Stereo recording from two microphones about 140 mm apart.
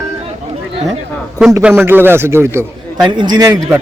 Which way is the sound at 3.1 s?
30° right (ahead or behind).